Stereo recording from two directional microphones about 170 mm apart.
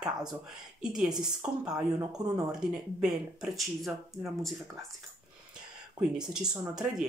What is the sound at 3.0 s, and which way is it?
Speech, centre (ahead or behind).